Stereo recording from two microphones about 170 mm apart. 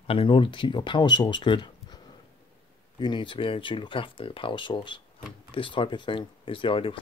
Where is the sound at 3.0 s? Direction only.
30° left (ahead or behind).